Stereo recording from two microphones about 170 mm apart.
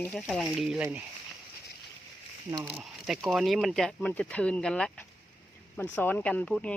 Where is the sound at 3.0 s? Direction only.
Centre (ahead or behind).